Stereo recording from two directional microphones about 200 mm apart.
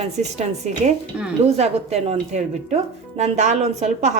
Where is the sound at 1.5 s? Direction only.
30° right (ahead or behind).